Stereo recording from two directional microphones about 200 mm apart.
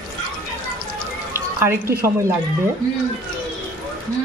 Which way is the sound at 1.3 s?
10° right (ahead or behind).